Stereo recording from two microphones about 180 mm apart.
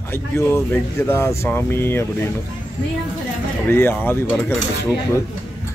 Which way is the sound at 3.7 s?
10° left (ahead or behind).